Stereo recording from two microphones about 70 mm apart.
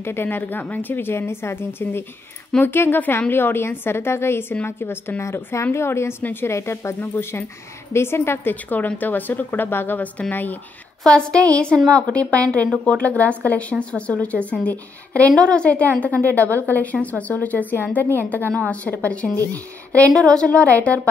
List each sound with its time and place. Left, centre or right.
0.0 s a woman's voice: left
11.1 s a woman's voice: centre
20.1 s a woman's voice: centre
20.4 s a woman's voice: centre